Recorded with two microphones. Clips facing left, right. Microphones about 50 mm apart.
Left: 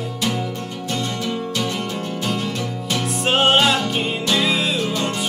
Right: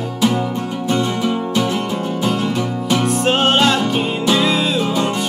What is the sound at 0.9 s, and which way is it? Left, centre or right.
Music, centre.